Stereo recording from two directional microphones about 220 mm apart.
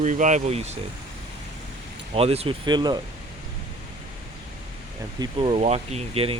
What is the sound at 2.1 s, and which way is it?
Speech, 25° right (ahead or behind).